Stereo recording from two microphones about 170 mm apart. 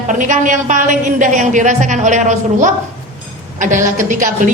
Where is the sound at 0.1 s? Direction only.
50° right (ahead or behind).